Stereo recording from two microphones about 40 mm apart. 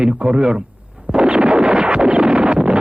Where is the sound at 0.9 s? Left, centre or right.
Centre.